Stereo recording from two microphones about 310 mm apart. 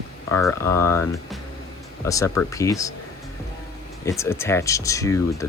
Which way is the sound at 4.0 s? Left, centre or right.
Centre.